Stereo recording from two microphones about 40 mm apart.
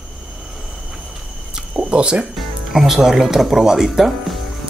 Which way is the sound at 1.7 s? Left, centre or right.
Right.